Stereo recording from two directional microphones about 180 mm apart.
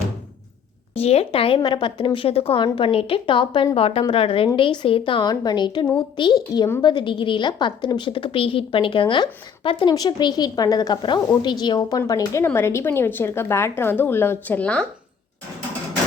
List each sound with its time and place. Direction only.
0.9 s a woman's voice: 35° left (ahead or behind); by 14.8 s 5° left (ahead or behind)